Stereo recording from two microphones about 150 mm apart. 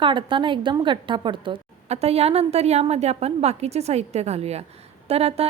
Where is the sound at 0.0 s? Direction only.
35° right (ahead or behind).